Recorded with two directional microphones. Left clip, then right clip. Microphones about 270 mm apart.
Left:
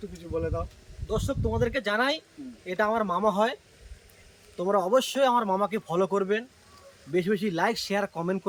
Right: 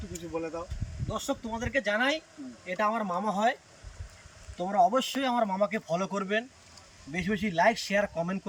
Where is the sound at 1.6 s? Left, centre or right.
Centre.